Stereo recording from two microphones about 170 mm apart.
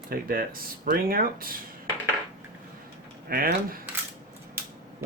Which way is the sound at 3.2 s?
60° right (ahead or behind).